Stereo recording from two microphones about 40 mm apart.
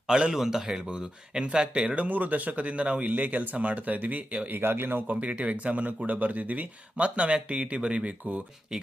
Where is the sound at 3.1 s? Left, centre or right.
Right.